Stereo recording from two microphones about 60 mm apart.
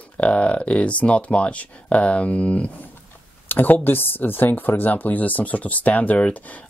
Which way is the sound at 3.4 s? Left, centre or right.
Left.